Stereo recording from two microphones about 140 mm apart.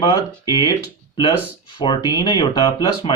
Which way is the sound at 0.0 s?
30° left (ahead or behind).